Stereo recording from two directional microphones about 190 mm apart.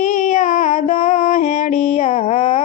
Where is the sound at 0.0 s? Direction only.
40° left (ahead or behind).